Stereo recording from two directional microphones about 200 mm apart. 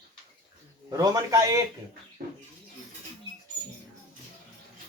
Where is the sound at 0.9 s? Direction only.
20° right (ahead or behind).